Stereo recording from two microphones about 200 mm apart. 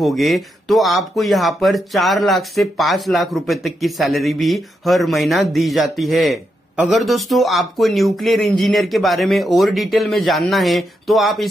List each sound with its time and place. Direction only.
0.0 s speech: centre (ahead or behind)